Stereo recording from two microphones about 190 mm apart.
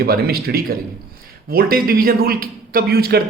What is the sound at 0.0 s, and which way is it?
Speech, 55° right (ahead or behind).